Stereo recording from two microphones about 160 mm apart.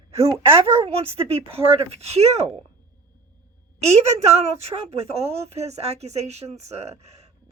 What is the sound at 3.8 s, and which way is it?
A woman's voice, 40° right (ahead or behind).